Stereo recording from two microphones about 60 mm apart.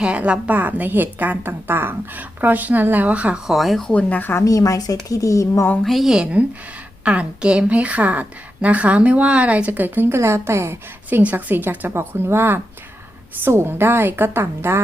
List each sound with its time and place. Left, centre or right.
0.0 s a woman's voice: centre
3.4 s speech: centre
3.8 s speech: left
4.2 s a woman's voice: left
4.4 s speech: left
5.0 s speech: left
5.8 s speech: centre
6.4 s a woman's voice: right
10.2 s a woman's voice: right
11.1 s a woman's voice: right
11.9 s a woman's voice: right